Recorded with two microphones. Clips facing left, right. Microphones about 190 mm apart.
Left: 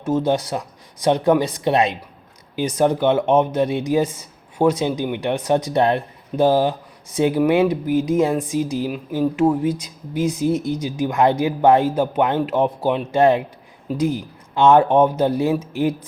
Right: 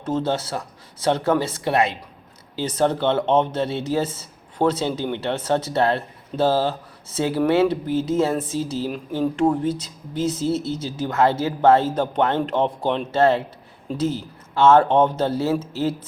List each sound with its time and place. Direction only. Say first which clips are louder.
0.0 s speech: left 4 dB; 10° left (ahead or behind)